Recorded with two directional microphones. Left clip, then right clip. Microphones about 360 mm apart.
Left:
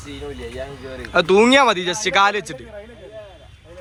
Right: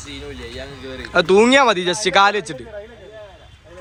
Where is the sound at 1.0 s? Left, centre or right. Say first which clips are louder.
Right 1 dB; centre.